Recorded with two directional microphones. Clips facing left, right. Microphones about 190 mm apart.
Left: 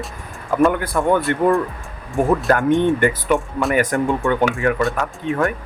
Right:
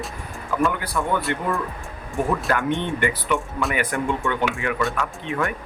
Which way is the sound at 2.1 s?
45° left (ahead or behind).